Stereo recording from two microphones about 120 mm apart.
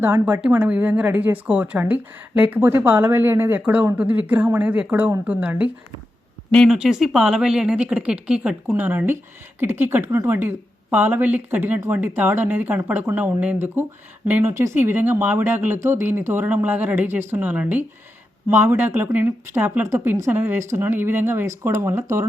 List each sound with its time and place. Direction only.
0.0 s speech: 20° right (ahead or behind)